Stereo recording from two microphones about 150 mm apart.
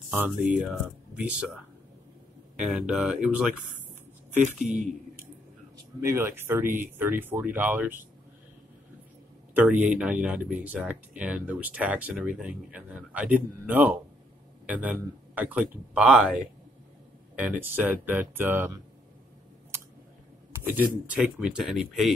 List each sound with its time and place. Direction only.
0.1 s speech: 10° right (ahead or behind)
2.6 s speech: 5° right (ahead or behind)
5.9 s speech: 15° right (ahead or behind)
9.5 s speech: 10° right (ahead or behind)
17.4 s speech: 10° right (ahead or behind)
20.6 s speech: 10° right (ahead or behind)